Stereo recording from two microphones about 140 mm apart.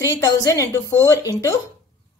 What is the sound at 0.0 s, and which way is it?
A woman's voice, 25° left (ahead or behind).